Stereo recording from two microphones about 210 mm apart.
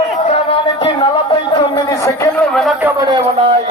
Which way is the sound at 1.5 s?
20° left (ahead or behind).